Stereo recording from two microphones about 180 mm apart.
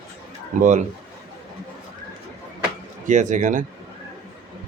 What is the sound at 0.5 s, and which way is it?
Speech, 45° right (ahead or behind).